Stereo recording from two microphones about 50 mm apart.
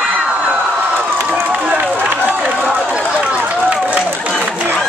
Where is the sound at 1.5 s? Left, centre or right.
Centre.